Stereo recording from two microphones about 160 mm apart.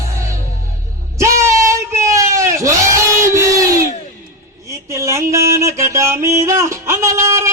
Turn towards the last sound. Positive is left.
turn(degrees=-20)  # may be behind; listen again after turning